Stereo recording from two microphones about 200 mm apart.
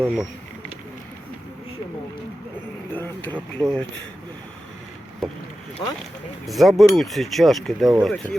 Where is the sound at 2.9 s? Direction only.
10° left (ahead or behind).